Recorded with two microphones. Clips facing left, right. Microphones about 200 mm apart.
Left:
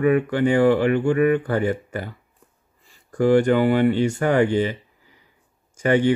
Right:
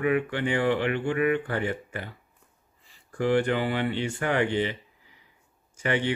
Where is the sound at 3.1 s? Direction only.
45° left (ahead or behind).